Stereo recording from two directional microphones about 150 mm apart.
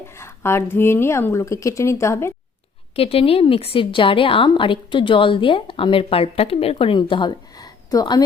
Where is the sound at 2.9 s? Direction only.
40° left (ahead or behind).